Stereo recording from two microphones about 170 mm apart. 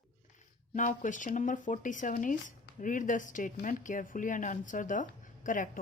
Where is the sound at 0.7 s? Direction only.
50° left (ahead or behind).